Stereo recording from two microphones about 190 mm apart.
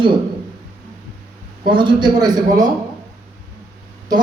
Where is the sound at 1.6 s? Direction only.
25° right (ahead or behind).